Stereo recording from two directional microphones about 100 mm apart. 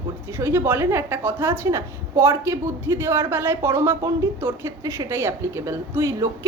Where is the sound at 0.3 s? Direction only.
25° right (ahead or behind).